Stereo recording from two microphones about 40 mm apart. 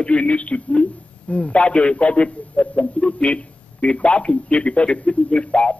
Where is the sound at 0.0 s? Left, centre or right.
Left.